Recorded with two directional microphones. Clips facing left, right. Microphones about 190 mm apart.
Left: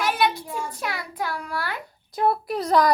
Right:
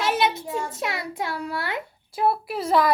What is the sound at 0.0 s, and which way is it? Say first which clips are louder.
Child singing: even; 25° right (ahead or behind).